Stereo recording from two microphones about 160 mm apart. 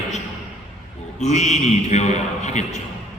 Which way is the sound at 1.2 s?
45° left (ahead or behind).